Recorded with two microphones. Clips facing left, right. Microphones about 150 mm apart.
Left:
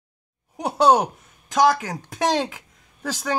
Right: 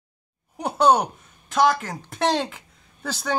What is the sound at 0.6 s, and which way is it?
Speech, centre (ahead or behind).